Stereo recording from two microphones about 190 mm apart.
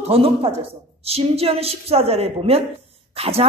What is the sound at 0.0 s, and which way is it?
A man's voice, 30° right (ahead or behind).